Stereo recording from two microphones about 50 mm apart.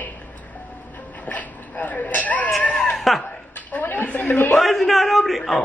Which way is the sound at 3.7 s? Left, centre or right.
Left.